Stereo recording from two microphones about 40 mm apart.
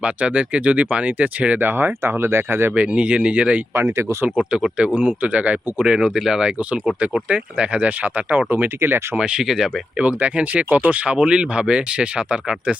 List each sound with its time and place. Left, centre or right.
0.0 s speech: right
1.5 s speech: right
2.7 s speech: right
4.9 s speech: right
5.8 s speech: centre
6.4 s speech: right
7.8 s speech: right
9.1 s speech: right
9.4 s speech: centre
10.0 s speech: right
11.2 s speech: right